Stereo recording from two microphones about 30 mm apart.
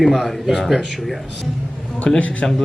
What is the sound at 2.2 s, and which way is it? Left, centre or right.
Speech, left.